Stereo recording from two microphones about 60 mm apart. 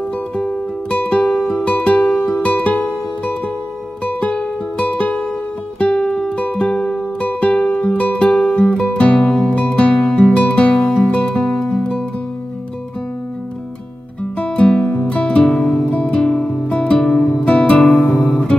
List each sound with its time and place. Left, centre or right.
0.4 s music: centre
14.4 s music: centre
15.8 s music: centre
17.5 s music: centre
17.8 s music: centre